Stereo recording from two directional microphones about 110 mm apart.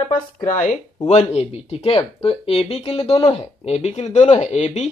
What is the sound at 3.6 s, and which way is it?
Speech, 85° left.